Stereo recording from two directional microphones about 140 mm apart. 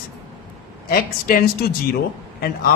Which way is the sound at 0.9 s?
90° left.